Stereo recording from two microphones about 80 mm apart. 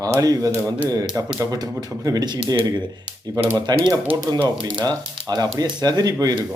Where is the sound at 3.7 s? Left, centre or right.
Right.